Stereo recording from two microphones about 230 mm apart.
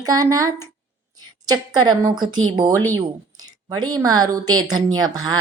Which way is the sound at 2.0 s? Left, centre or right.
Centre.